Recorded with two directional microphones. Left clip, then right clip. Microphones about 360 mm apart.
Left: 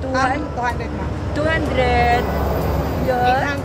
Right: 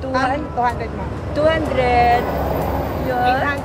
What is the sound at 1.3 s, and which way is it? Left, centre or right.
Speech, centre.